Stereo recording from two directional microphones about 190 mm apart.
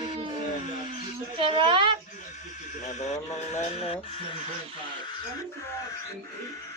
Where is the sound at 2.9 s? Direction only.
40° left (ahead or behind).